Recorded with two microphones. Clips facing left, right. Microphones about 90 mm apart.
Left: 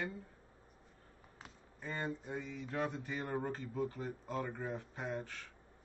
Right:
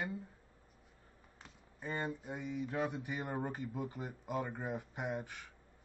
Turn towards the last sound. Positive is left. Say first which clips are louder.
# right 1 dB
turn(degrees=-15)  # may be behind; listen again after turning